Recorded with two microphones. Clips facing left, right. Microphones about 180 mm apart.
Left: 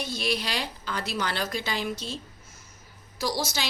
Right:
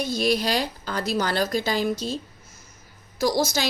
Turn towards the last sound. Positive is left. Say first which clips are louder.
# right 7 dB
turn(degrees=-45)  # may be behind; listen again after turning